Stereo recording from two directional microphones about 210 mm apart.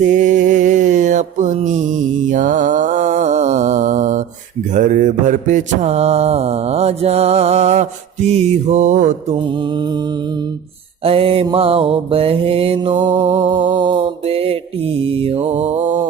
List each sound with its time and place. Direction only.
0.0 s music: 35° right (ahead or behind)
4.7 s mantra: 40° right (ahead or behind)
9.6 s mantra: 20° right (ahead or behind)
11.0 s mantra: 25° right (ahead or behind)